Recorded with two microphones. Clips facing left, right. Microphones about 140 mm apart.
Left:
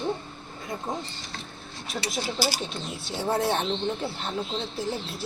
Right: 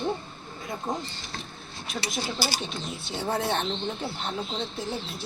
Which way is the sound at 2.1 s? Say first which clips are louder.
Left 2 dB; centre (ahead or behind).